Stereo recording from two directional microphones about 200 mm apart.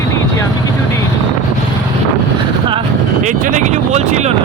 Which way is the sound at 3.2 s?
40° right (ahead or behind).